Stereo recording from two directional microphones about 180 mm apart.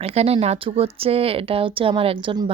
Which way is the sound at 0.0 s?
35° right (ahead or behind).